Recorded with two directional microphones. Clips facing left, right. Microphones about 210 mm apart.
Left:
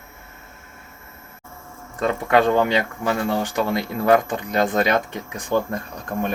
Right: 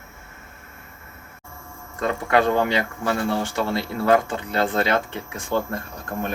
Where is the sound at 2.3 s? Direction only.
15° left (ahead or behind).